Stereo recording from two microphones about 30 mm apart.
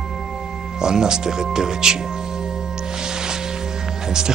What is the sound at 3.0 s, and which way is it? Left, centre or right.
Music, right.